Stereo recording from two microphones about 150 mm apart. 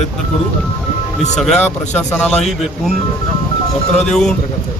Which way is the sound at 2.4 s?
Centre (ahead or behind).